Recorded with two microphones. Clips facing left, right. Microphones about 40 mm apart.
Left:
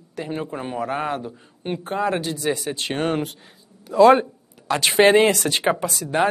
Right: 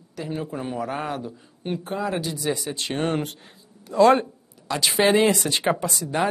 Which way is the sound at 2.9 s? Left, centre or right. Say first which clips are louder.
Left 1 dB; centre.